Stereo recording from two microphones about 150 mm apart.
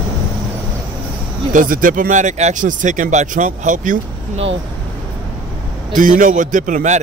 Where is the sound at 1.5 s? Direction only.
65° right (ahead or behind).